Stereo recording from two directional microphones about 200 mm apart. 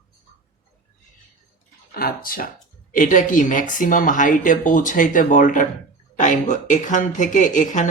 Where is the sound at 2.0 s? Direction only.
45° left (ahead or behind).